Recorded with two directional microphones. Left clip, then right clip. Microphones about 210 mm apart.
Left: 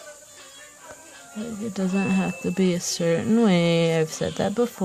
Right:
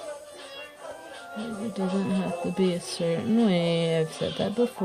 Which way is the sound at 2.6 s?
55° left (ahead or behind).